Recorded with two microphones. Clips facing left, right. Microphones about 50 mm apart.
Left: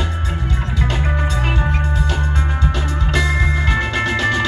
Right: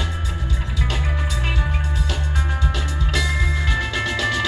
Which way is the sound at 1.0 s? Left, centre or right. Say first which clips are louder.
Left 5 dB; left.